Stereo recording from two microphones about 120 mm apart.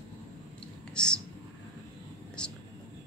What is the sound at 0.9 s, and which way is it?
Whispering, 5° left (ahead or behind).